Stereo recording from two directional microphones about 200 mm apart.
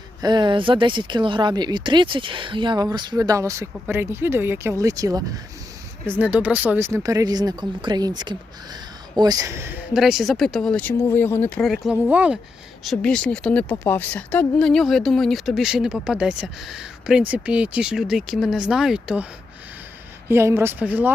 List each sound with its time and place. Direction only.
0.2 s speech: 20° right (ahead or behind)